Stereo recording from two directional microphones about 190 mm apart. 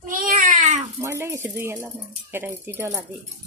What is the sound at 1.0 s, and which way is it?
Speech, 15° right (ahead or behind).